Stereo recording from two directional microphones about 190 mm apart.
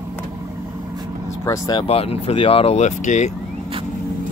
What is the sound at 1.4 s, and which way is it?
Speech, 20° left (ahead or behind).